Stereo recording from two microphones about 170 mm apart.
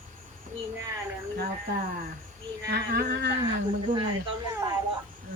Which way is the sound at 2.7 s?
65° right (ahead or behind).